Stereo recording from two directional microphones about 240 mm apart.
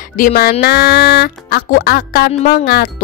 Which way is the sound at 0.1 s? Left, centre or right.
Left.